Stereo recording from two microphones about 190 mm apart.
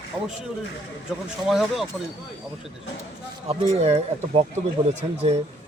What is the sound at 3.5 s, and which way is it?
Speech, 30° right (ahead or behind).